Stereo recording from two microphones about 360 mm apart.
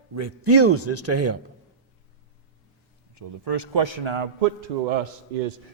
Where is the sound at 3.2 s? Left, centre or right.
Right.